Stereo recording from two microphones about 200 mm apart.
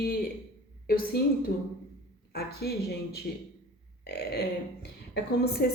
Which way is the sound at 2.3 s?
50° left (ahead or behind).